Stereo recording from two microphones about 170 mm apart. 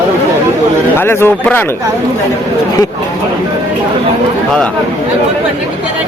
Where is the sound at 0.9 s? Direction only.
15° left (ahead or behind).